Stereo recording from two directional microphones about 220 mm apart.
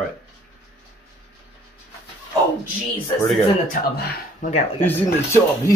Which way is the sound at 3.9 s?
45° left (ahead or behind).